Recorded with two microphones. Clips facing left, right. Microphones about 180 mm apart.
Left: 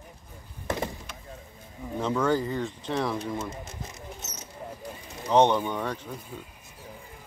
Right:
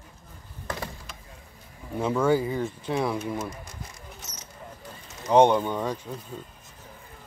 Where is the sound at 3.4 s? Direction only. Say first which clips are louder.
Left 1 dB; 25° left (ahead or behind).